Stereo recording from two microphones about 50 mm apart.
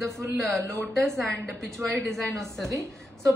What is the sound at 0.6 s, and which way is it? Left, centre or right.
Speech, right.